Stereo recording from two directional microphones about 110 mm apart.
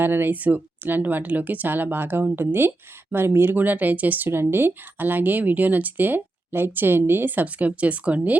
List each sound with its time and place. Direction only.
0.0 s speech: 20° right (ahead or behind)